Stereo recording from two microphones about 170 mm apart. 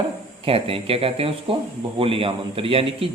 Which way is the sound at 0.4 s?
35° right (ahead or behind).